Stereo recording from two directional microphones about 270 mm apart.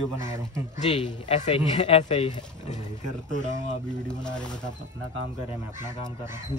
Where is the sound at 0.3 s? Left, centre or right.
Left.